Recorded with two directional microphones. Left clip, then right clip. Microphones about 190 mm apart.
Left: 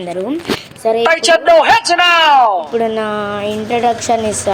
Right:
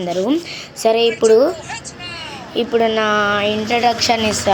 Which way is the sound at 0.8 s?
20° right (ahead or behind).